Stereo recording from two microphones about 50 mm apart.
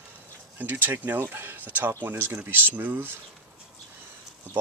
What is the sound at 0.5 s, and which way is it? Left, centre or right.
Speech, right.